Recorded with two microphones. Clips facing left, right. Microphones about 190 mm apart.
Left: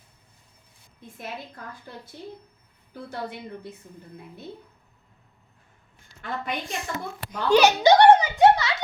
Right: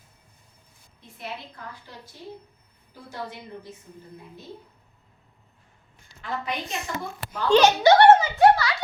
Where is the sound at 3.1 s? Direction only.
60° left (ahead or behind).